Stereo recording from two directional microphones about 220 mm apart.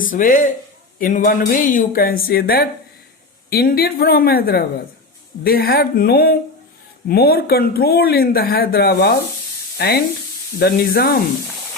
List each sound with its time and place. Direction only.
0.0 s speech: 40° left (ahead or behind)
9.7 s sizzle: 45° left (ahead or behind)
10.6 s speech: 45° left (ahead or behind)